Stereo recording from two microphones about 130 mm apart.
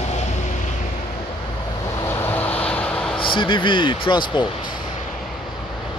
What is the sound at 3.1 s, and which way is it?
Speech, 40° left (ahead or behind).